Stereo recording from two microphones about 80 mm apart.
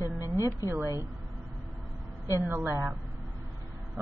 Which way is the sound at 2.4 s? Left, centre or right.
Right.